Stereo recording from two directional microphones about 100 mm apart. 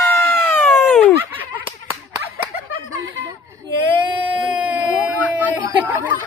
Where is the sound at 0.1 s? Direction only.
20° left (ahead or behind).